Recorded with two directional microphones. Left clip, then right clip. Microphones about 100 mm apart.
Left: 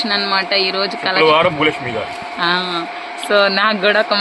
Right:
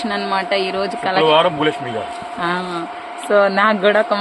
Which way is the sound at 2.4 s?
15° right (ahead or behind).